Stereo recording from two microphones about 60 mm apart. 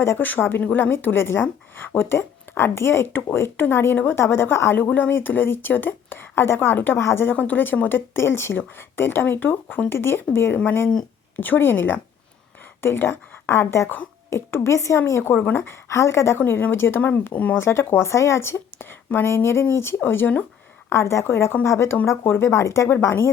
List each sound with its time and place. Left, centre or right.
0.2 s speech: left
4.8 s speech: left
7.3 s a woman's voice: left
17.3 s speech: left
17.6 s speech: left
20.0 s speech: left
20.9 s speech: left
22.9 s speech: left